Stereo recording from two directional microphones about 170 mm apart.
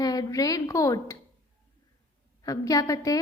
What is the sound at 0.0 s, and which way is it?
A woman's voice, 20° left (ahead or behind).